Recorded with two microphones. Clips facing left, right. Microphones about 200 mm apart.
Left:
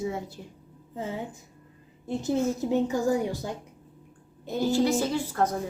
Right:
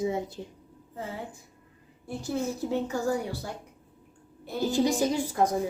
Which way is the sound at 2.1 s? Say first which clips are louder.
Left 5 dB; 20° left (ahead or behind).